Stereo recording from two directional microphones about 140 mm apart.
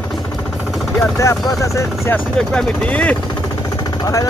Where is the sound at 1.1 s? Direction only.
20° left (ahead or behind).